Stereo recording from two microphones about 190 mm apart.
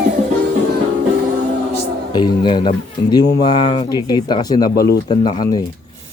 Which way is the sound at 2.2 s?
25° left (ahead or behind).